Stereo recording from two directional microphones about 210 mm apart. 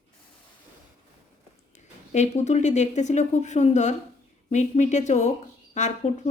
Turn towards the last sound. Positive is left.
turn(degrees=35)  # may be behind; listen again after turning